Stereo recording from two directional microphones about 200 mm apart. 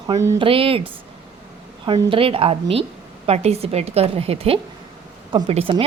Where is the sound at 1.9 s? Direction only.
25° right (ahead or behind).